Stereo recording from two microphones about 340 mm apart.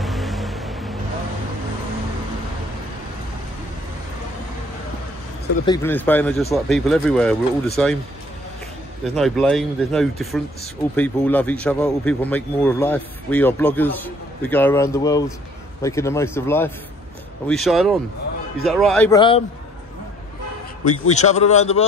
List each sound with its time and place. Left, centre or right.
0.0 s vehicle: centre
5.7 s a man's voice: centre
9.0 s a man's voice: centre
21.1 s a man's voice: centre